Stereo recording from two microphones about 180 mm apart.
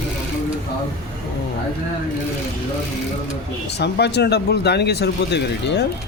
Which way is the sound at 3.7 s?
70° left (ahead or behind).